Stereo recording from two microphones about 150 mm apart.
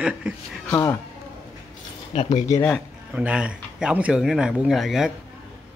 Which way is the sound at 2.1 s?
50° left (ahead or behind).